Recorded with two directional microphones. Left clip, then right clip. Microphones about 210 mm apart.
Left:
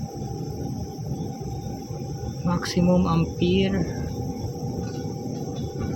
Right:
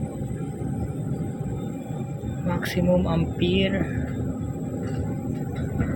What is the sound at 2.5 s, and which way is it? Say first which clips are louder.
Speech: even; 25° left (ahead or behind).